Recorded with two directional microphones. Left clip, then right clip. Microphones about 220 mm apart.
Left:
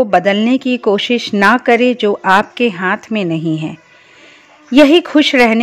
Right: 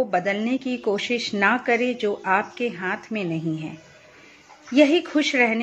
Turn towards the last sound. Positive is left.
turn(degrees=50)  # may be behind; listen again after turning